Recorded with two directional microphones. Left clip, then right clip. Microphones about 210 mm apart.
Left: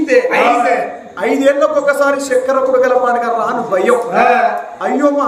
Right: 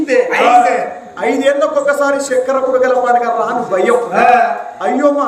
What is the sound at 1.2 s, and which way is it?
A man's voice, 10° left (ahead or behind).